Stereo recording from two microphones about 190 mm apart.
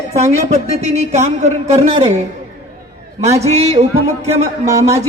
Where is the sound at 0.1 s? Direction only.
35° right (ahead or behind).